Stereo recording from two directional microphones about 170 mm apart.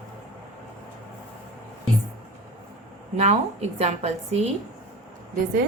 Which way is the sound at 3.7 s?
40° right (ahead or behind).